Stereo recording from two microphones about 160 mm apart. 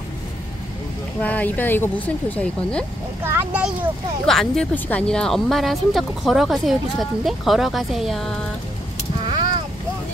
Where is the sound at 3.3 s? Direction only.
10° right (ahead or behind).